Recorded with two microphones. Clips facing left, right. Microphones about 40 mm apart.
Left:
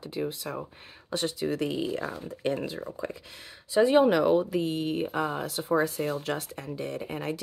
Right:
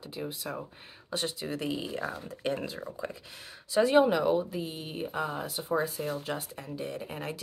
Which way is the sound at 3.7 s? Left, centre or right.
Left.